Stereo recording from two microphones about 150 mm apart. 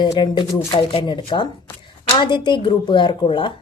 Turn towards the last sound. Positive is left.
turn(degrees=35)  # may be behind; listen again after turning